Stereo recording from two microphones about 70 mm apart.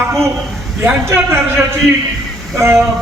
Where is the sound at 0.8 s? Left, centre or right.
Right.